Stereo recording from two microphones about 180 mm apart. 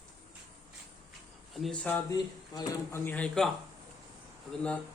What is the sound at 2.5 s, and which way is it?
Speech, 20° left (ahead or behind).